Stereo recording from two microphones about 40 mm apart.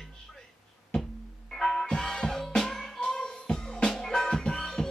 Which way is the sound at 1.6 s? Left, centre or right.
Centre.